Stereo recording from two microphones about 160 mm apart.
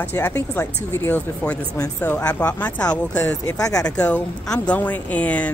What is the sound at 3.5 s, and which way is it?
Speech, 20° left (ahead or behind).